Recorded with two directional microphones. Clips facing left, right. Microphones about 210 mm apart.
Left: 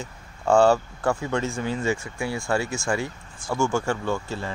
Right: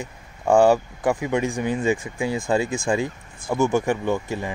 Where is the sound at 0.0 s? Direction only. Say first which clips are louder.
Right 2 dB; 15° right (ahead or behind).